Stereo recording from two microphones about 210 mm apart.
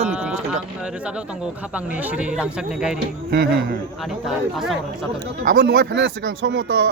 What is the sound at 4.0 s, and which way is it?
Speech, centre (ahead or behind).